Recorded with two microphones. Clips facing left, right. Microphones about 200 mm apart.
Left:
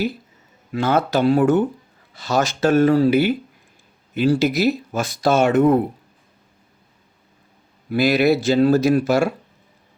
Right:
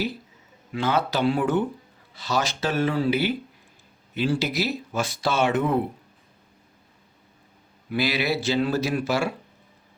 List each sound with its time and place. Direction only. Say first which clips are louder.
0.7 s speech: left 5 dB; 45° left (ahead or behind)
7.9 s speech: left 9 dB; 45° left (ahead or behind)